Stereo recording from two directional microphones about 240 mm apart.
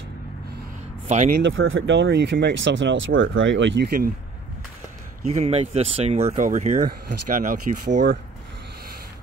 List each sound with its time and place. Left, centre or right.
1.0 s speech: right
1.4 s speech: right
5.2 s speech: right